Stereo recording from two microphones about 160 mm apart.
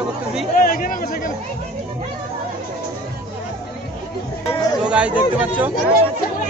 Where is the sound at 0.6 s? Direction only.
65° left (ahead or behind).